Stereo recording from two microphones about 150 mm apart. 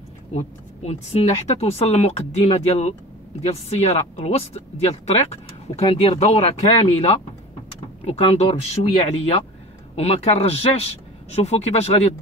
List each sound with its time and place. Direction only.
0.3 s speech: 45° left (ahead or behind)